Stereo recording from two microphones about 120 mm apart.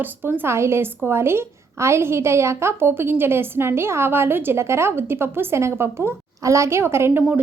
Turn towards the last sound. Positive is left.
turn(degrees=-15)  # may be behind; listen again after turning